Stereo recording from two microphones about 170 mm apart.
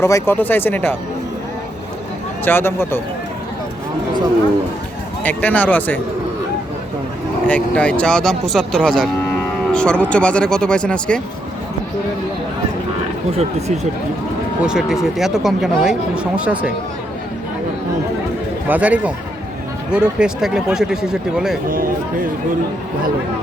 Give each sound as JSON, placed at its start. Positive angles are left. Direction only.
{"t": 0.0, "sound": "speech", "side_deg": 15}
{"t": 2.4, "sound": "speech", "side_deg": 10}
{"t": 5.2, "sound": "speech", "side_deg": 10}
{"t": 7.4, "sound": "speech", "side_deg": 10}
{"t": 13.3, "sound": "speech", "side_deg": -40}
{"t": 14.6, "sound": "speech", "side_deg": -5}
{"t": 18.7, "sound": "speech", "side_deg": -10}
{"t": 21.7, "sound": "speech", "side_deg": -55}